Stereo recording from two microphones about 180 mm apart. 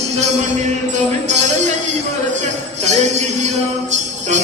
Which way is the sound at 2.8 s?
40° right (ahead or behind).